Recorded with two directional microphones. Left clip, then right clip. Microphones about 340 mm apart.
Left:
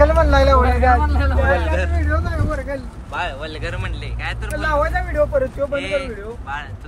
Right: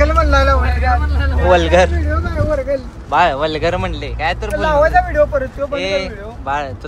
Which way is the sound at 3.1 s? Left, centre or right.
Centre.